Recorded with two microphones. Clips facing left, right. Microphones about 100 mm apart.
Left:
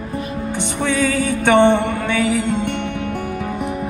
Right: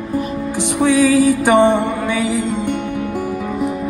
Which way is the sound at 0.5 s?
70° left (ahead or behind).